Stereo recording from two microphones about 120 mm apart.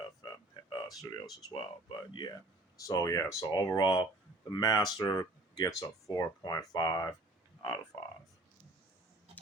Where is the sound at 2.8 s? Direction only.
30° left (ahead or behind).